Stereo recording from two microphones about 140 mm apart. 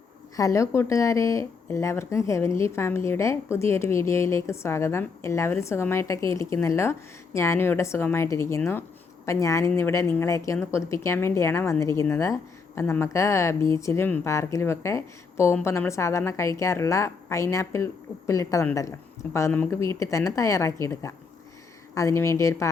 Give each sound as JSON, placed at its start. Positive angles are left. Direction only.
{"t": 0.3, "sound": "speech", "side_deg": 20}